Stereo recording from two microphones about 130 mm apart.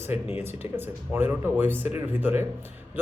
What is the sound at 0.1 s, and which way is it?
Speech, 15° right (ahead or behind).